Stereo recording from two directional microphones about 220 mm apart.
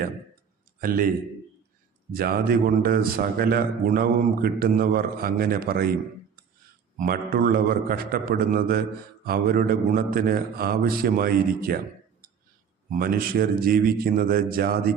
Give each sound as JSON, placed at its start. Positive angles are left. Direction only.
{"t": 0.8, "sound": "a man's voice", "side_deg": -40}
{"t": 2.1, "sound": "a man's voice", "side_deg": -45}
{"t": 7.0, "sound": "a man's voice", "side_deg": -40}
{"t": 12.9, "sound": "a man's voice", "side_deg": -40}